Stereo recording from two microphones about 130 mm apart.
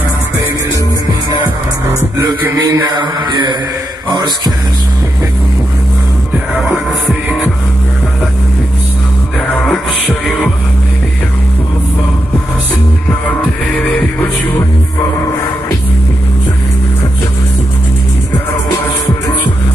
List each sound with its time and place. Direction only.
2.6 s a man's voice: 35° right (ahead or behind)
9.5 s music: 10° left (ahead or behind)
13.7 s music: 10° left (ahead or behind)